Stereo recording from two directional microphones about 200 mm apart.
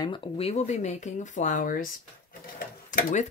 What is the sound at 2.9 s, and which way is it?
Speech, 40° left (ahead or behind).